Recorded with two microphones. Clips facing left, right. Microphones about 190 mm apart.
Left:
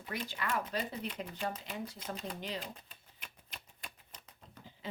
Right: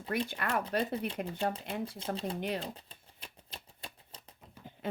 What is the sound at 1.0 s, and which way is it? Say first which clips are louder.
Speech: right 5 dB; 30° right (ahead or behind).